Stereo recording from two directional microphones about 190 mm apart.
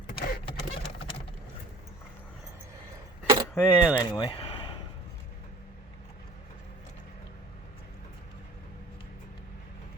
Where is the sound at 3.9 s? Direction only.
25° left (ahead or behind).